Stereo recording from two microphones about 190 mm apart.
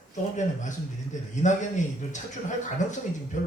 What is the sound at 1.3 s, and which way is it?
A man's voice, 40° left (ahead or behind).